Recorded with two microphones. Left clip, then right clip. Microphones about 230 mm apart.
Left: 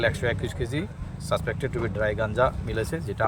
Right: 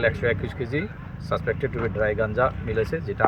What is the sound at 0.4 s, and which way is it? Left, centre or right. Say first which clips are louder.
Speech: right 2 dB; centre.